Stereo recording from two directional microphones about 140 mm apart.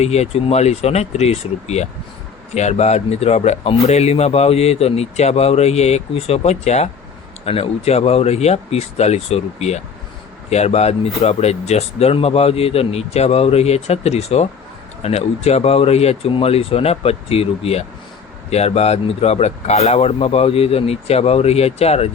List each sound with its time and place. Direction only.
0.0 s speech: 50° left (ahead or behind)